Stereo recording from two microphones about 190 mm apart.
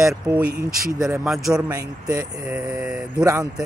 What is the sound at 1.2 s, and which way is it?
Speech, centre (ahead or behind).